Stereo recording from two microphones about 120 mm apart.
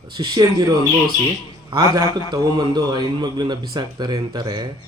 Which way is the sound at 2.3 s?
35° right (ahead or behind).